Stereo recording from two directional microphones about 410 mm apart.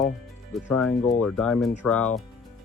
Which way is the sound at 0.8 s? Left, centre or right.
Centre.